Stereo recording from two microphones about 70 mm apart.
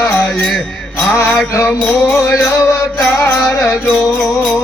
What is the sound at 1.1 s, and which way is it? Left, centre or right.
Music, left.